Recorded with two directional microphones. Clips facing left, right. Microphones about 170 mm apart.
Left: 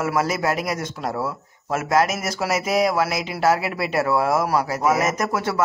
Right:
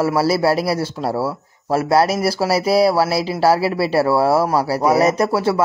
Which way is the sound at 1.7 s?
35° right (ahead or behind).